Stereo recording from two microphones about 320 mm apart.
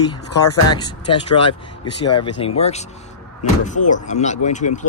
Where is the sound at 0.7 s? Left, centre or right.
Centre.